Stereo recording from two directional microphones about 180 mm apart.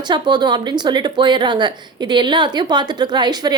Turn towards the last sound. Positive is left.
turn(degrees=-20)  # may be behind; listen again after turning